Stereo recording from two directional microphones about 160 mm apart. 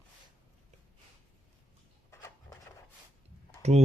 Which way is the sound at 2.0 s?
15° left (ahead or behind).